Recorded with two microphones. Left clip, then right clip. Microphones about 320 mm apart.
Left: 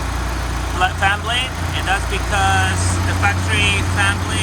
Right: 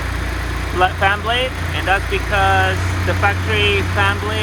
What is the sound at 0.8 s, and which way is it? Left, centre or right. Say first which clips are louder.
Speech: right 2 dB; centre.